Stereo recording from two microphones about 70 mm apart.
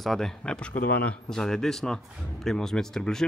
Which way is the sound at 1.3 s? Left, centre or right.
Centre.